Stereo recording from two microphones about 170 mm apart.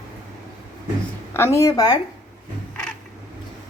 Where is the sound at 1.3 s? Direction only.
15° left (ahead or behind).